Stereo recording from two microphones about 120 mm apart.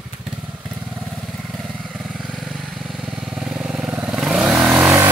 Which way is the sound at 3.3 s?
5° right (ahead or behind).